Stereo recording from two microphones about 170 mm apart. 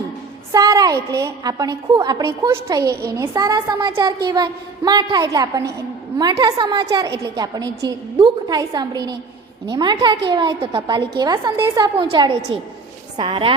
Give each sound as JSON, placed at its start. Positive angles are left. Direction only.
{"t": 0.5, "sound": "a woman's voice", "side_deg": -20}
{"t": 11.9, "sound": "a woman's voice", "side_deg": -30}